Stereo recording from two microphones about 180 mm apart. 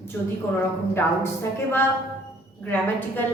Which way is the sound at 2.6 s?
10° left (ahead or behind).